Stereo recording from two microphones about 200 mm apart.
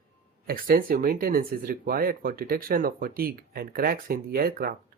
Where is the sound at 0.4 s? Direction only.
45° right (ahead or behind).